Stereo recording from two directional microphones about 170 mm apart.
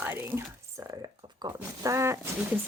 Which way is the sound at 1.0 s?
25° right (ahead or behind).